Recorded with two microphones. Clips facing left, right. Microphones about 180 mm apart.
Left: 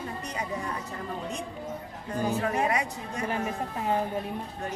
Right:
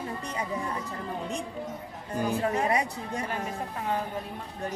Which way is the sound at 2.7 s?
35° right (ahead or behind).